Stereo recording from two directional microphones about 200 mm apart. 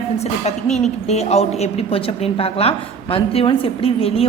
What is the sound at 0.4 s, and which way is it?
A woman's voice, 35° left (ahead or behind).